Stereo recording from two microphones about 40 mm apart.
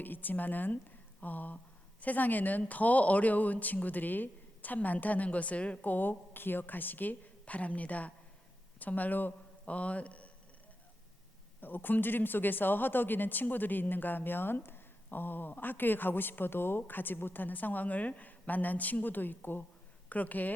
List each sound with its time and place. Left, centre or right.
0.0 s a woman's voice: left
5.8 s a woman's voice: left
9.6 s a woman's voice: left
11.6 s a woman's voice: left
20.1 s speech: left